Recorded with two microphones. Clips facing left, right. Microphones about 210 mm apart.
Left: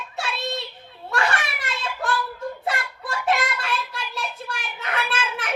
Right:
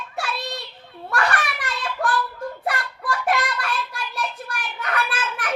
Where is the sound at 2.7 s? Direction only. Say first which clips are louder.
Right 4 dB; 25° left (ahead or behind).